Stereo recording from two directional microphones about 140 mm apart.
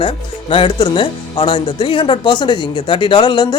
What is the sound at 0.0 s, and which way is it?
Speech, 40° left (ahead or behind).